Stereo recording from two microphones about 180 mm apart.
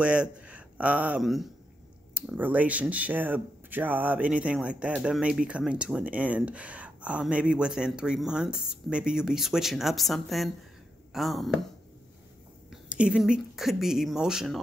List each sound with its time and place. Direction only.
0.0 s speech: 5° right (ahead or behind)
12.9 s speech: 5° right (ahead or behind)